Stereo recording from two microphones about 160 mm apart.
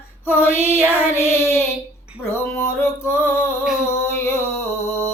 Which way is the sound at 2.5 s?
15° left (ahead or behind).